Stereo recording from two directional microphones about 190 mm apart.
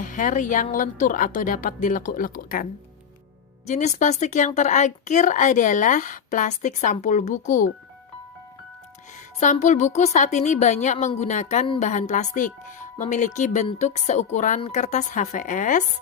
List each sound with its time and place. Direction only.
0.0 s a woman's voice: 45° left (ahead or behind)
3.7 s speech: 40° left (ahead or behind)
9.4 s speech: 40° left (ahead or behind)